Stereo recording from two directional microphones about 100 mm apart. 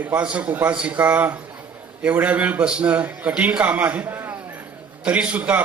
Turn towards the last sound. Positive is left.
turn(degrees=-15)  # may be behind; listen again after turning